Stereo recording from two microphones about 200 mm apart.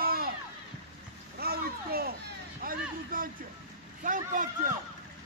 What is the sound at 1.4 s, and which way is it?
A man's voice, 50° right (ahead or behind).